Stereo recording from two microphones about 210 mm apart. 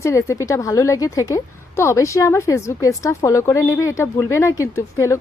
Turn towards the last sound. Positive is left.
turn(degrees=15)  # may be behind; listen again after turning